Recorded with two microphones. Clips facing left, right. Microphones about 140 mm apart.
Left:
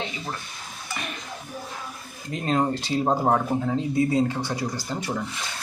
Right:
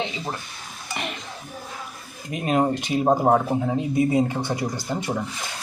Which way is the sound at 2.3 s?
15° right (ahead or behind).